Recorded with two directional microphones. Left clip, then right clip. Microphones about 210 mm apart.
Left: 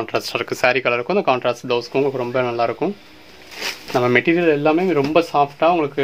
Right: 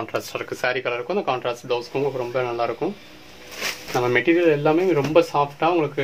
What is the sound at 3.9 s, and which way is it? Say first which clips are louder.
Speech: left 3 dB; 45° left (ahead or behind).